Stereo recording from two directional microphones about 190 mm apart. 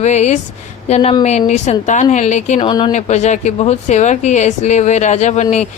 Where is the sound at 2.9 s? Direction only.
35° left (ahead or behind).